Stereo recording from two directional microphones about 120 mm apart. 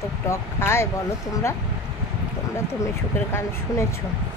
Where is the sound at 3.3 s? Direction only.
25° left (ahead or behind).